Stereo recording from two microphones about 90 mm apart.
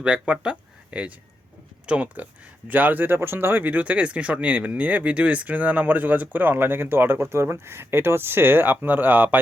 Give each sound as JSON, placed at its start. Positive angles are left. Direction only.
{"t": 0.0, "sound": "speech", "side_deg": -15}